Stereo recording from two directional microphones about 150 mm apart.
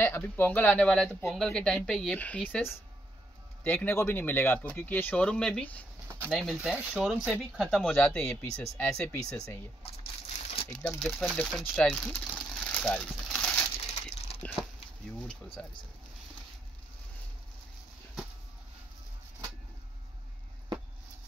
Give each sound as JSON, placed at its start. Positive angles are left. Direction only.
{"t": 0.0, "sound": "speech", "side_deg": 15}
{"t": 6.3, "sound": "speech", "side_deg": -5}
{"t": 10.3, "sound": "crumpling", "side_deg": 50}
{"t": 10.7, "sound": "speech", "side_deg": 5}
{"t": 12.3, "sound": "a sound", "side_deg": 0}